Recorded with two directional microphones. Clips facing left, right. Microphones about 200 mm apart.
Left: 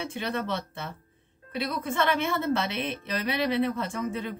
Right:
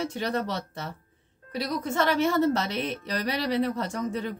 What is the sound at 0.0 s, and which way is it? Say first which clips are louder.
A woman's voice: right 3 dB; 40° right (ahead or behind).